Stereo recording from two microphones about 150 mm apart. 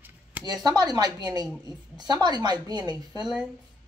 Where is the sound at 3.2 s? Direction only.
Centre (ahead or behind).